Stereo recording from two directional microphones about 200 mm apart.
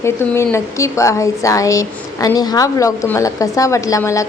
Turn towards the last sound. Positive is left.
turn(degrees=15)  # may be behind; listen again after turning